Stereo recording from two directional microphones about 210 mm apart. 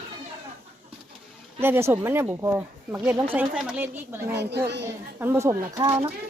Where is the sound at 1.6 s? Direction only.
10° right (ahead or behind).